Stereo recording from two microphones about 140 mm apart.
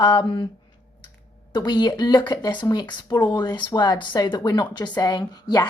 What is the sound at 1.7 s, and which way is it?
Speech, 30° left (ahead or behind).